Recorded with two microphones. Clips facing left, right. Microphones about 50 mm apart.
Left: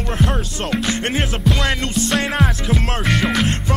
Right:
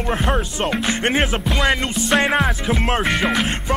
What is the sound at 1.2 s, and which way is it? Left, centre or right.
Music, centre.